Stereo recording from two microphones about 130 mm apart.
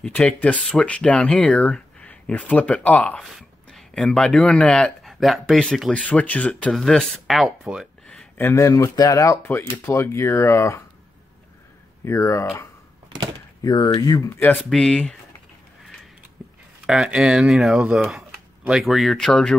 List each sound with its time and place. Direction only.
0.0 s speech: 5° left (ahead or behind)
8.4 s speech: 20° left (ahead or behind)
12.0 s speech: 20° left (ahead or behind)
13.7 s speech: 35° left (ahead or behind); by 14.6 s 15° left (ahead or behind)
14.7 s speech: 5° left (ahead or behind)
16.8 s speech: 5° right (ahead or behind)